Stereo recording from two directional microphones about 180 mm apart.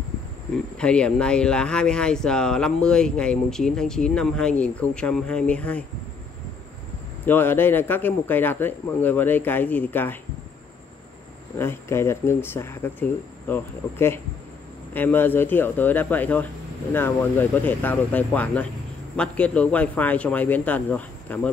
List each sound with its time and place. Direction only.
0.7 s speech: 5° left (ahead or behind)
7.2 s a man's voice: 10° left (ahead or behind)
11.5 s a man's voice: 15° left (ahead or behind)